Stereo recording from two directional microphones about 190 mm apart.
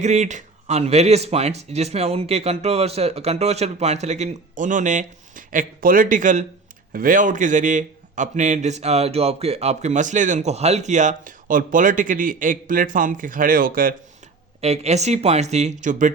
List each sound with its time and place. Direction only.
0.0 s a man's voice: 40° right (ahead or behind)
14.6 s a man's voice: 35° right (ahead or behind)